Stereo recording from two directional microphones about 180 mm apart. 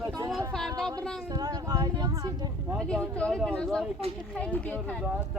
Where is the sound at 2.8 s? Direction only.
5° left (ahead or behind).